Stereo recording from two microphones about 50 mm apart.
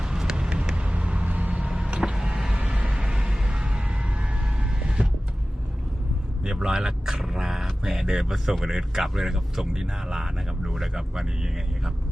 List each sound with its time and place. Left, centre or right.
0.0 s vehicle: centre
2.1 s a sound: centre
4.8 s vehicle: centre
6.4 s vehicle: centre
7.9 s speech: centre